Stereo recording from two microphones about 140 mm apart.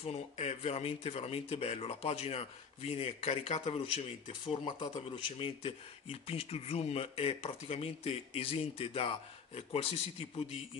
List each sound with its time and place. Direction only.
0.0 s speech: 50° left (ahead or behind)
5.6 s speech: 45° left (ahead or behind)